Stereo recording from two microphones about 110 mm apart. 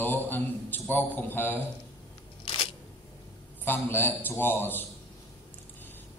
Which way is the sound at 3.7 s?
20° left (ahead or behind).